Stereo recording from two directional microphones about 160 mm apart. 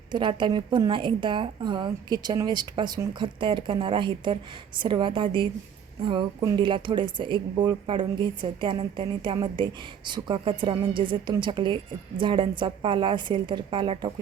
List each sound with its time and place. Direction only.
0.1 s a woman's voice: 30° right (ahead or behind)